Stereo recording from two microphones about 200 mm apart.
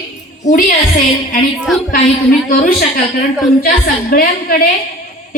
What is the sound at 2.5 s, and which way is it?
A woman's voice, 45° left (ahead or behind).